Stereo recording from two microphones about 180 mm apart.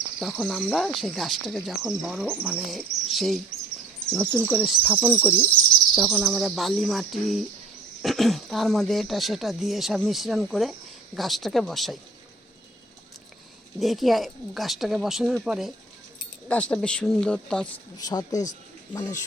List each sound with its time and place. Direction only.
0.2 s speech: centre (ahead or behind)
4.4 s speech: 10° right (ahead or behind)
5.0 s speech: 10° right (ahead or behind)
13.7 s speech: centre (ahead or behind)
17.9 s speech: 20° left (ahead or behind)